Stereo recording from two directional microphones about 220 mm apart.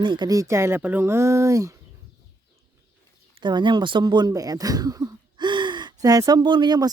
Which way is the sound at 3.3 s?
20° right (ahead or behind).